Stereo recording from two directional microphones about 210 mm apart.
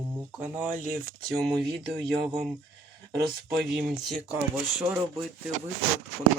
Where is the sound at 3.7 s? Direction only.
Centre (ahead or behind).